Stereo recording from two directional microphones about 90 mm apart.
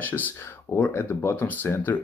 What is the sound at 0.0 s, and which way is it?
Speech, 20° left (ahead or behind).